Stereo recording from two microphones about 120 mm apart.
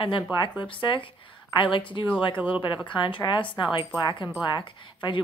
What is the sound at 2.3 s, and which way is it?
Speech, 15° right (ahead or behind).